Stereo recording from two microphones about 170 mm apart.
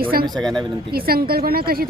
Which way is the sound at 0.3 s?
5° left (ahead or behind).